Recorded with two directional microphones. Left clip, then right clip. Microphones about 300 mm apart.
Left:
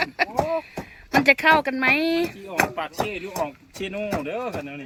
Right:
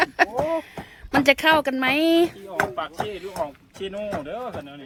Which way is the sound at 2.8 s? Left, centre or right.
Left.